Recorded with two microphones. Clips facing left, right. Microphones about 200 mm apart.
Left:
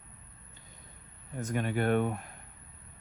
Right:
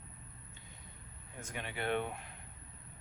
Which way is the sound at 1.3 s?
45° left (ahead or behind).